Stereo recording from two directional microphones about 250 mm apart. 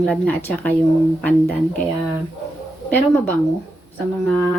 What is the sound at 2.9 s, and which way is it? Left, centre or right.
Speech, centre.